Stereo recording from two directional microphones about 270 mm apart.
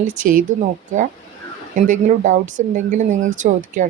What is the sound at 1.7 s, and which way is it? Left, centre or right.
Speech, right.